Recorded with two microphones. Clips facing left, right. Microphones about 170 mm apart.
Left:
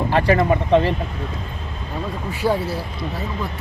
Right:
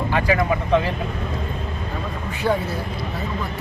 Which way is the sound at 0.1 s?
30° left (ahead or behind).